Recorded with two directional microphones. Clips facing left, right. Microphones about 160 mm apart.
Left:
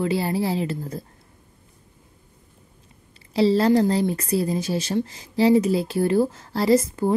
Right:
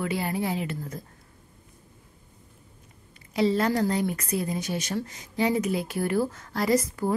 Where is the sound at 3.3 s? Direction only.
30° left (ahead or behind).